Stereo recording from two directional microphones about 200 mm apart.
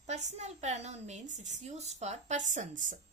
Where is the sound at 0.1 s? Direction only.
35° right (ahead or behind).